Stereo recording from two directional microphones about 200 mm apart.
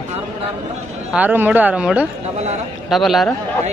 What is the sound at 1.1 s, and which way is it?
A man's voice, 10° right (ahead or behind).